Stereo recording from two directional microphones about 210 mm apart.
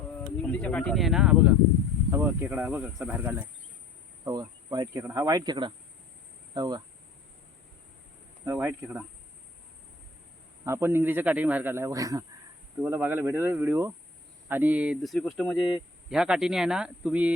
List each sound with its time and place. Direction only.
0.4 s speech: 5° left (ahead or behind)
4.3 s speech: 20° right (ahead or behind)
8.4 s speech: 10° right (ahead or behind)
10.6 s speech: 10° right (ahead or behind)